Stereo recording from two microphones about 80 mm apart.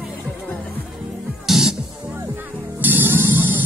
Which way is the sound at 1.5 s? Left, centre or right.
Centre.